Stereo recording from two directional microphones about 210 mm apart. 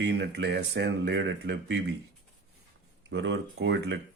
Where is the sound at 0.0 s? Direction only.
55° right (ahead or behind).